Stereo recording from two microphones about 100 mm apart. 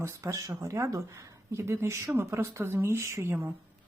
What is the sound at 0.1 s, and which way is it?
Speech, 30° right (ahead or behind).